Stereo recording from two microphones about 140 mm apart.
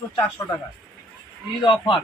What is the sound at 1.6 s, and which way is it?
Speech, 35° left (ahead or behind).